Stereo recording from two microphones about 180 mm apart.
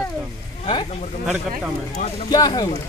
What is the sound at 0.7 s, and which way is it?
Speech, 30° left (ahead or behind).